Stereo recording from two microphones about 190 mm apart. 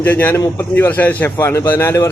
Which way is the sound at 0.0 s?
10° left (ahead or behind).